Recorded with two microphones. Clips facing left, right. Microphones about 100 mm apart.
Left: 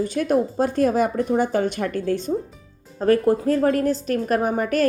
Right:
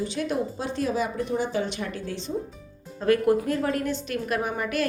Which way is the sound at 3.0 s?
35° left (ahead or behind).